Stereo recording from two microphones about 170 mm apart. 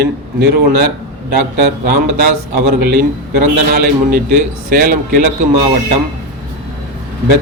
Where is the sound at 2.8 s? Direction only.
65° right (ahead or behind).